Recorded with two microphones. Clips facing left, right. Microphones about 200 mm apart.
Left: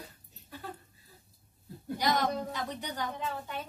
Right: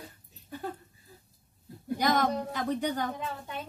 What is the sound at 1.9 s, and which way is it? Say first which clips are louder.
A woman's voice: right 3 dB; 50° right (ahead or behind).